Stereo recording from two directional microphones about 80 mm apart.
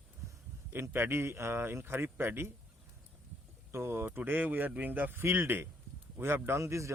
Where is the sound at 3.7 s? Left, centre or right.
Right.